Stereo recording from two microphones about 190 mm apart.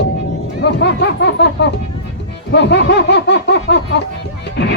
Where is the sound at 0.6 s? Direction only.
65° left (ahead or behind).